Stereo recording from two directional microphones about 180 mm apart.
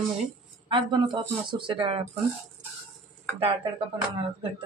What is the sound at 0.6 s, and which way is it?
Speech, 25° right (ahead or behind).